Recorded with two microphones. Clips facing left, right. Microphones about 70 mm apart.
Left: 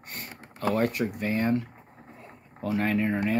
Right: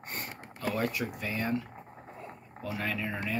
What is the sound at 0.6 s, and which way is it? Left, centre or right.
Speech, left.